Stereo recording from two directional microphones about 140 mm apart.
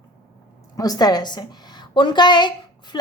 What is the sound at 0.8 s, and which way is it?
A woman's voice, 25° left (ahead or behind).